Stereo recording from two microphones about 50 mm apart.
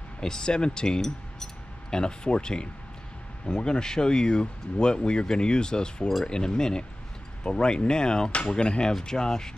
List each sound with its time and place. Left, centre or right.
0.2 s speech: centre